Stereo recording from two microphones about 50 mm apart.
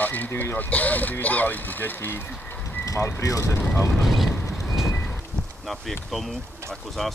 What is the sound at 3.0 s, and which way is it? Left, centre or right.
Speech, left.